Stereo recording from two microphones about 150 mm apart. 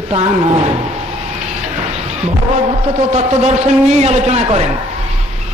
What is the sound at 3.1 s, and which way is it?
Speech, 45° right (ahead or behind).